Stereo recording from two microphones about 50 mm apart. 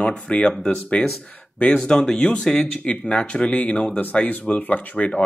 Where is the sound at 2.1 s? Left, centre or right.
Centre.